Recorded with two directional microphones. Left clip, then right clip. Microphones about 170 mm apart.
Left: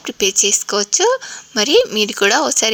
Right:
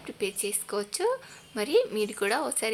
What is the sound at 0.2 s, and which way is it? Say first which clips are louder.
A woman's voice: left 17 dB; 45° left (ahead or behind).